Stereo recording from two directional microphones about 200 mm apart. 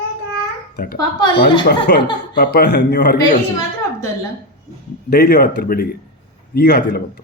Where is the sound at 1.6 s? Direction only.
55° left (ahead or behind).